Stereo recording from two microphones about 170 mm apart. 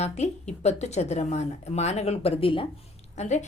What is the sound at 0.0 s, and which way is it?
A woman's voice, 40° left (ahead or behind).